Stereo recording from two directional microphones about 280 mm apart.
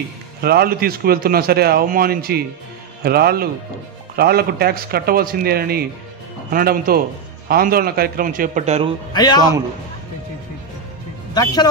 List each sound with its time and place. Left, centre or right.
0.4 s a man's voice: right
9.1 s speech: centre
11.3 s speech: centre